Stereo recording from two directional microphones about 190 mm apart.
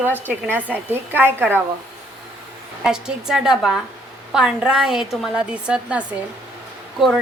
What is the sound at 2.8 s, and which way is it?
A woman's voice, 5° right (ahead or behind).